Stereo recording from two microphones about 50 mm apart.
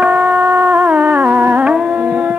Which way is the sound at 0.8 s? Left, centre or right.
Right.